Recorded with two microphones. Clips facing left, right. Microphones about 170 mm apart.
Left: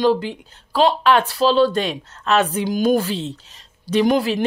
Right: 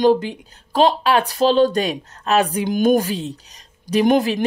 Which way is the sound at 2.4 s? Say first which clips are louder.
Right 1 dB; 15° right (ahead or behind).